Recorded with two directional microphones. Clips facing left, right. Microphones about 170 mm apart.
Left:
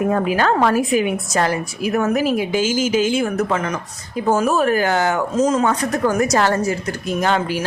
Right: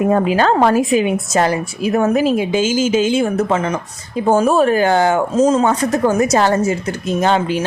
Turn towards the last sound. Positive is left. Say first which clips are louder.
# right 4 dB
turn(degrees=-25)  # may be behind; listen again after turning